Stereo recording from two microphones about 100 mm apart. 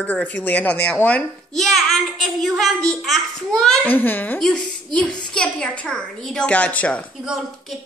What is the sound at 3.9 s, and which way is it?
Speech, 20° left (ahead or behind).